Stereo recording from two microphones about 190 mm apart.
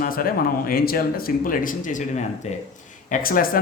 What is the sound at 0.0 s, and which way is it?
Speech, 50° left (ahead or behind).